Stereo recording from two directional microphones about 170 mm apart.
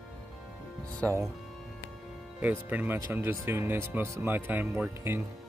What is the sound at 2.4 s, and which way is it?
Speech, 10° right (ahead or behind).